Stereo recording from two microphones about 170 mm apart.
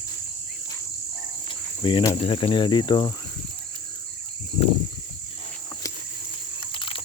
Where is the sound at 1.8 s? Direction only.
30° left (ahead or behind).